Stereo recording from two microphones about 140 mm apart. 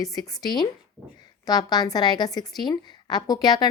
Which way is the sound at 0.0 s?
25° left (ahead or behind).